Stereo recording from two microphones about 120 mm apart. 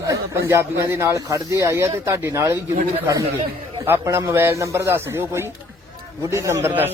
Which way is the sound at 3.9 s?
25° right (ahead or behind).